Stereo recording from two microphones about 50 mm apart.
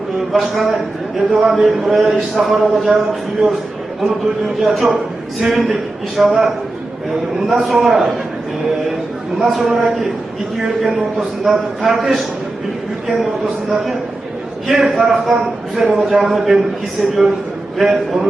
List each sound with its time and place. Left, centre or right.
0.2 s a man's voice: centre
7.4 s a man's voice: centre
9.4 s a man's voice: centre
13.7 s a man's voice: centre